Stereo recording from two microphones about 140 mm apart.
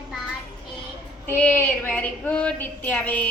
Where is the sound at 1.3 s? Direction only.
15° left (ahead or behind).